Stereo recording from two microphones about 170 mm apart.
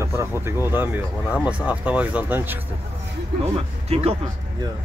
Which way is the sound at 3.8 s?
35° right (ahead or behind).